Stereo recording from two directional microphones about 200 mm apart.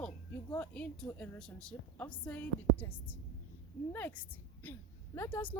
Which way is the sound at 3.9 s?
10° left (ahead or behind).